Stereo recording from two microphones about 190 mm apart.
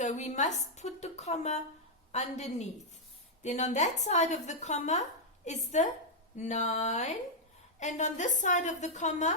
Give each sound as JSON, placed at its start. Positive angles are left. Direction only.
{"t": 0.0, "sound": "a woman's voice", "side_deg": 40}